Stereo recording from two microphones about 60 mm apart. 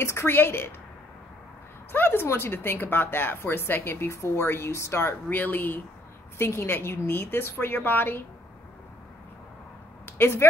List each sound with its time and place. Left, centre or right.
0.0 s a woman's voice: left
1.9 s a sound: left
2.2 s a woman's voice: left
6.3 s a woman's voice: left
10.1 s speech: left